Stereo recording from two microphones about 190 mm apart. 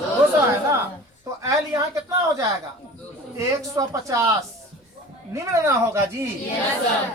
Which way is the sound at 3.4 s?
15° right (ahead or behind).